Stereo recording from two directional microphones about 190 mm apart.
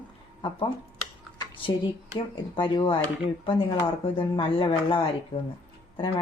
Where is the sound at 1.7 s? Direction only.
25° left (ahead or behind).